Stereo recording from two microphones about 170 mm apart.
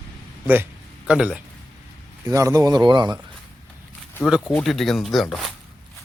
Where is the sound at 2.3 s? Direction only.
20° right (ahead or behind).